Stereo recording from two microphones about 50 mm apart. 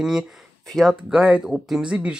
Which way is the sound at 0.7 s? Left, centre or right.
Centre.